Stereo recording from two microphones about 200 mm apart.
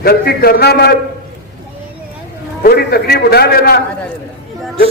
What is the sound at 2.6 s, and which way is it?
A man's voice, 50° left (ahead or behind).